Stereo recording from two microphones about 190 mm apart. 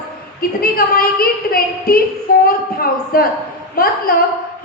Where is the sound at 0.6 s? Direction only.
55° left (ahead or behind).